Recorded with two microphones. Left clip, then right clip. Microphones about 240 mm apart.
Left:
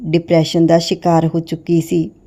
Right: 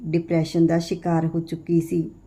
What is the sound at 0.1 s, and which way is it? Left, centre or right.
Speech, left.